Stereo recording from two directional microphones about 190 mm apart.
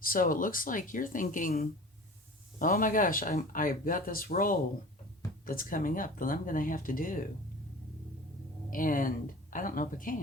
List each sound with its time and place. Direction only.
0.0 s speech: 50° left (ahead or behind)
8.7 s speech: 45° left (ahead or behind)